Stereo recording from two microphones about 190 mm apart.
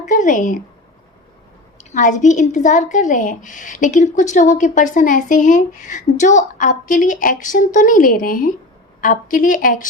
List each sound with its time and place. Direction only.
0.1 s speech: 40° left (ahead or behind)
1.8 s speech: 40° left (ahead or behind)